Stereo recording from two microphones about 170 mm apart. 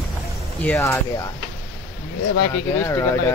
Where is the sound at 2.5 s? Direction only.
15° left (ahead or behind).